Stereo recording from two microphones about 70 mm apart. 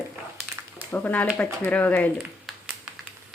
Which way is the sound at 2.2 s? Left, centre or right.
Centre.